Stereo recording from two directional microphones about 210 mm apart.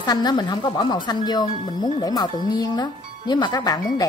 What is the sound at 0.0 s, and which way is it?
A woman's voice, 20° left (ahead or behind).